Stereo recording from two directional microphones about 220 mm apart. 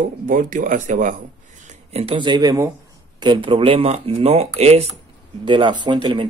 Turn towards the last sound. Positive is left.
turn(degrees=-25)  # may be behind; listen again after turning